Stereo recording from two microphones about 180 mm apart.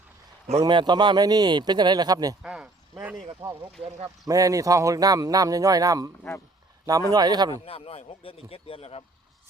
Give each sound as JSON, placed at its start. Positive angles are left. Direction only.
{"t": 0.6, "sound": "speech", "side_deg": -25}
{"t": 2.4, "sound": "a sound", "side_deg": -5}
{"t": 3.4, "sound": "speech", "side_deg": -20}
{"t": 7.1, "sound": "speech", "side_deg": -20}
{"t": 7.6, "sound": "speech", "side_deg": 35}